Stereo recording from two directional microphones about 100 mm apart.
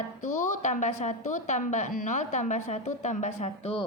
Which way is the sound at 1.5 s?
90° left.